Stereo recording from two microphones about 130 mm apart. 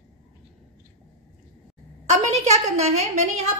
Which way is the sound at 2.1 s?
60° right (ahead or behind).